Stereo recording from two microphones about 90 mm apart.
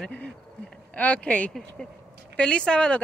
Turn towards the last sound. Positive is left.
turn(degrees=10)  # may be behind; listen again after turning